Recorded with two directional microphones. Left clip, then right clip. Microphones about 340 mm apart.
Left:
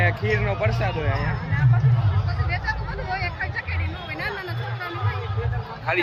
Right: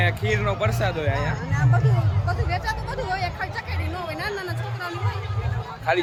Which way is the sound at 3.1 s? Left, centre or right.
Centre.